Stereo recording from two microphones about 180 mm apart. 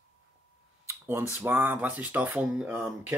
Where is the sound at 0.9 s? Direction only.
15° right (ahead or behind).